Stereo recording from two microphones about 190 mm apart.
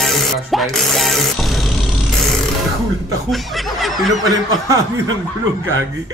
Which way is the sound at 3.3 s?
Centre (ahead or behind).